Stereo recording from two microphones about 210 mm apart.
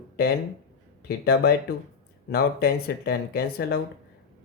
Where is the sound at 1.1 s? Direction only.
50° left (ahead or behind).